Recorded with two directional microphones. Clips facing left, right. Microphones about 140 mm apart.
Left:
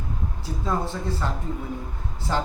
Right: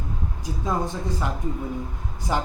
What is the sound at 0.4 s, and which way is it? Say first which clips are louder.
A man's voice: right 1 dB; 15° right (ahead or behind).